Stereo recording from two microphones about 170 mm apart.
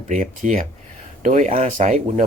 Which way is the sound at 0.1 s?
45° right (ahead or behind).